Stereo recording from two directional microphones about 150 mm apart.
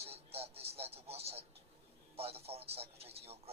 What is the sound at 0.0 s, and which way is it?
Music, 40° right (ahead or behind).